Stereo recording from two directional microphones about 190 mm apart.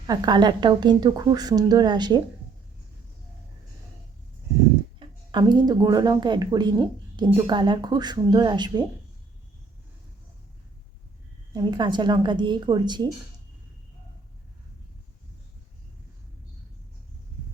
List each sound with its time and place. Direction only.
0.1 s a woman's voice: 20° right (ahead or behind)
4.9 s a woman's voice: 25° right (ahead or behind)
11.5 s a woman's voice: 25° right (ahead or behind)